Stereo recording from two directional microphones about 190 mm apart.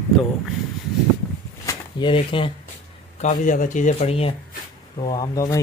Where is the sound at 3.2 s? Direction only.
40° left (ahead or behind).